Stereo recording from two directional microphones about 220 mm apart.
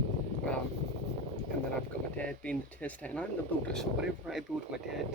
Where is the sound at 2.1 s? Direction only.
5° left (ahead or behind).